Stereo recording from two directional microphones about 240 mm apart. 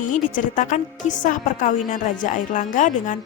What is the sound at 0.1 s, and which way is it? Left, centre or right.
Speech, left.